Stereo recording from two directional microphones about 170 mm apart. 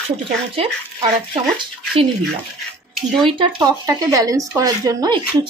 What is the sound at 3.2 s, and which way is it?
Speech, 30° right (ahead or behind).